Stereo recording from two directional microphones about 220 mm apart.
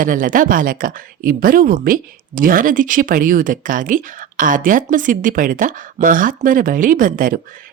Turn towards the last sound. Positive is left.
turn(degrees=-40)  # may be behind; listen again after turning